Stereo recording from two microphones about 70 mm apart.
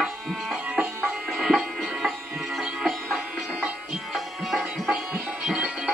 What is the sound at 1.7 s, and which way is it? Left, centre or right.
Music, centre.